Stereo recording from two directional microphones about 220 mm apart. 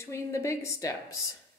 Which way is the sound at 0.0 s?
15° left (ahead or behind).